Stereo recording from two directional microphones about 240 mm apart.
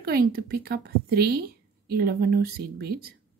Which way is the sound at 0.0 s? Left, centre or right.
Right.